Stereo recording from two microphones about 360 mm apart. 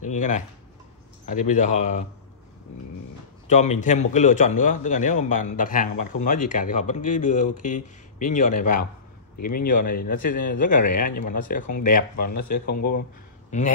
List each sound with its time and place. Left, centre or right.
0.0 s a man's voice: centre
3.4 s a man's voice: centre
12.3 s speech: left